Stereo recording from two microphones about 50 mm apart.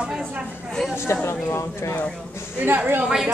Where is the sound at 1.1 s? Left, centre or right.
Left.